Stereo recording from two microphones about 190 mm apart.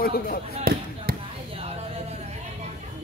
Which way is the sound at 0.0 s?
50° left (ahead or behind).